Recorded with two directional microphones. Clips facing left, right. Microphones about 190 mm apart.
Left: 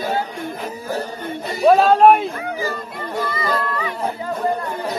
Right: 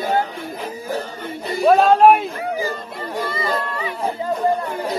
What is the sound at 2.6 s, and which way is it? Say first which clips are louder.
Music: even; 15° right (ahead or behind).